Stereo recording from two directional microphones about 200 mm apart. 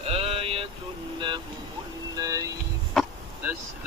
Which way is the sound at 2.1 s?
15° right (ahead or behind).